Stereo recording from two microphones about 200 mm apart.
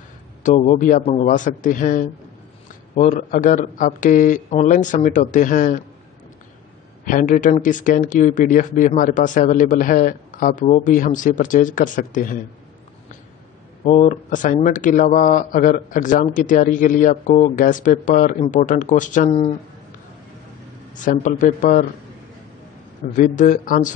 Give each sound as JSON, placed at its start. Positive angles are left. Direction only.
{"t": 0.4, "sound": "speech", "side_deg": 40}
{"t": 7.1, "sound": "speech", "side_deg": 40}
{"t": 13.8, "sound": "speech", "side_deg": 35}
{"t": 21.0, "sound": "speech", "side_deg": 40}
{"t": 23.1, "sound": "speech", "side_deg": 40}